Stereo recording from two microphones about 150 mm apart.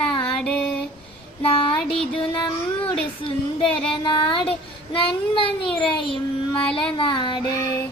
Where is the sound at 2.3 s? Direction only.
30° left (ahead or behind).